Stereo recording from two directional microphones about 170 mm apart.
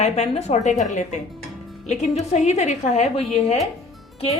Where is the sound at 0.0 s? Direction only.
40° left (ahead or behind).